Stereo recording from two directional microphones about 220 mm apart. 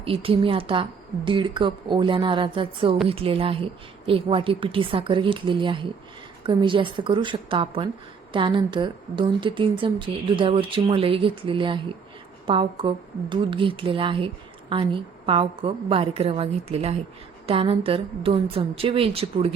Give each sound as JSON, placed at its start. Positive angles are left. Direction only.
{"t": 0.0, "sound": "a woman's voice", "side_deg": -25}